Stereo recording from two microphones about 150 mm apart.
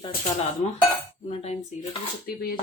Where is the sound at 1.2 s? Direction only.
45° left (ahead or behind).